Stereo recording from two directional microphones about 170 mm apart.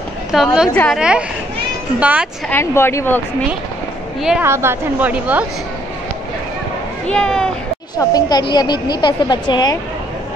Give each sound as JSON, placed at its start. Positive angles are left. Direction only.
{"t": 0.3, "sound": "a woman's voice", "side_deg": -5}
{"t": 2.5, "sound": "speech", "side_deg": 15}
{"t": 4.4, "sound": "a woman's voice", "side_deg": -15}
{"t": 7.1, "sound": "speech", "side_deg": 5}
{"t": 8.0, "sound": "a woman's voice", "side_deg": 25}